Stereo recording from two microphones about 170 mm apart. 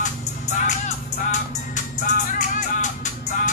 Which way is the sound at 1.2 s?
50° left (ahead or behind).